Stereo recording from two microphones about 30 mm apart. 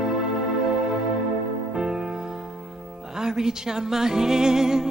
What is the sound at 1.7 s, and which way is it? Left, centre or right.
Music, centre.